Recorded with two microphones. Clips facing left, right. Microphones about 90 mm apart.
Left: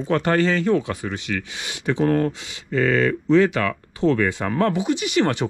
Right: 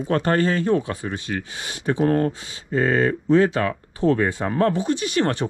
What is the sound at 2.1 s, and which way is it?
Speech, 25° right (ahead or behind).